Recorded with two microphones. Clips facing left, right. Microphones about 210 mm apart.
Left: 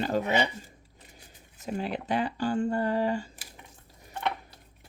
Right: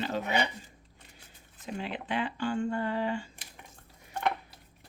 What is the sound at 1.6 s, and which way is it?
Speech, 40° left (ahead or behind).